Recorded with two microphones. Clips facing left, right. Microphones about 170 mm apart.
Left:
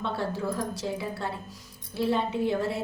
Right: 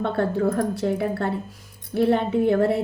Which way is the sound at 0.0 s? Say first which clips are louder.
Right 8 dB; 55° right (ahead or behind).